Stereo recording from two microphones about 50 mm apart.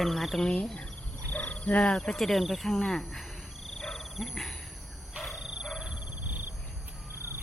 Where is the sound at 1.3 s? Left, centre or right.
Left.